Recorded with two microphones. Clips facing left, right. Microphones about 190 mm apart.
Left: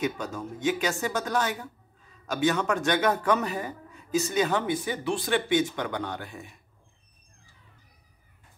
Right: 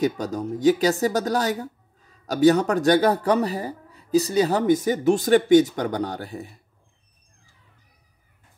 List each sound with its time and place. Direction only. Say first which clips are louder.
0.0 s speech: right 7 dB; 40° right (ahead or behind)